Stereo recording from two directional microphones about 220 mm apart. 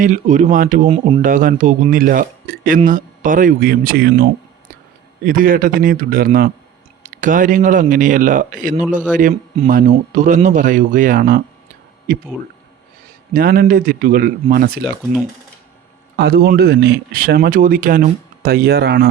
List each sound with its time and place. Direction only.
0.0 s speech: 35° right (ahead or behind)
13.3 s speech: 40° right (ahead or behind)
16.1 s a man's voice: 45° right (ahead or behind)